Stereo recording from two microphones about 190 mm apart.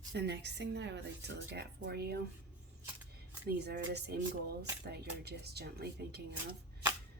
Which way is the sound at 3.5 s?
60° right (ahead or behind).